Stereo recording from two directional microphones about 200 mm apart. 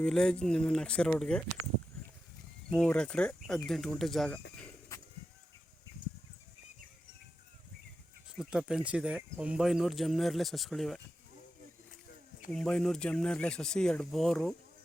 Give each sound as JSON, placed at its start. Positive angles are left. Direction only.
{"t": 0.0, "sound": "speech", "side_deg": 5}
{"t": 2.6, "sound": "speech", "side_deg": 5}
{"t": 4.9, "sound": "a sound", "side_deg": 15}
{"t": 8.4, "sound": "speech", "side_deg": -5}
{"t": 12.5, "sound": "speech", "side_deg": 5}